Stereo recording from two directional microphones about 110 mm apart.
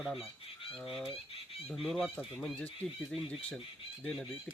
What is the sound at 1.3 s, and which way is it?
Fowl, 60° left (ahead or behind).